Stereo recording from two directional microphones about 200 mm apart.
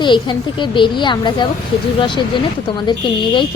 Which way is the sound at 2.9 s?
25° left (ahead or behind).